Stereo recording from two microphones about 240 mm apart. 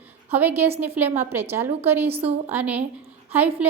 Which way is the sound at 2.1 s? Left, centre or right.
Right.